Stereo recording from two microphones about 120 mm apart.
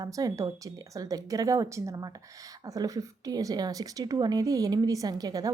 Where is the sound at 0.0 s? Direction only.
30° right (ahead or behind).